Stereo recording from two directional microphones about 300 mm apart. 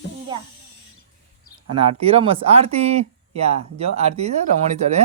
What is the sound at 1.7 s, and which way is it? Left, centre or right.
Speech, centre.